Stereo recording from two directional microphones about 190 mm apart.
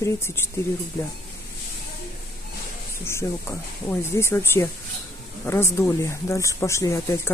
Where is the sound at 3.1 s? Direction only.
15° left (ahead or behind).